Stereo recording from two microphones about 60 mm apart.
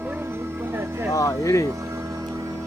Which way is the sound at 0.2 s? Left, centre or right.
Right.